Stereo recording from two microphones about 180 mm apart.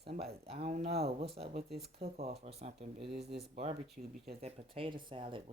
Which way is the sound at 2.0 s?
60° right (ahead or behind).